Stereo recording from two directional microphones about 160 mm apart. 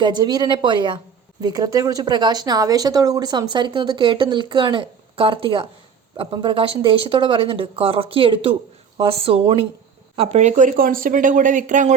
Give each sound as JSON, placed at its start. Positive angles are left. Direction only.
{"t": 0.0, "sound": "speech", "side_deg": -25}
{"t": 10.2, "sound": "speech", "side_deg": -45}